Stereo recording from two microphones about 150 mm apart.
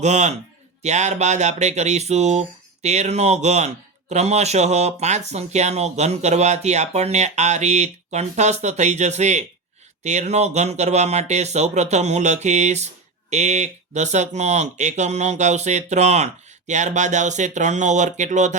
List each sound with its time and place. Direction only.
0.0 s speech: 50° right (ahead or behind)